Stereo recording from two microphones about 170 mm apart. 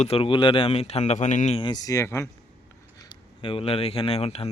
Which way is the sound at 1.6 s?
25° left (ahead or behind).